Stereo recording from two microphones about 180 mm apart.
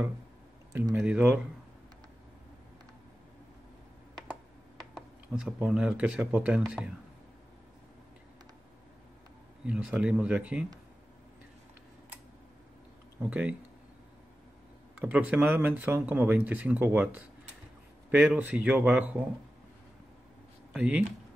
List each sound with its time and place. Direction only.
0.7 s speech: 15° right (ahead or behind)
4.9 s speech: 5° right (ahead or behind)
9.7 s speech: 5° right (ahead or behind)
13.2 s speech: 5° right (ahead or behind)
15.0 s speech: 10° right (ahead or behind)
20.7 s speech: 5° right (ahead or behind)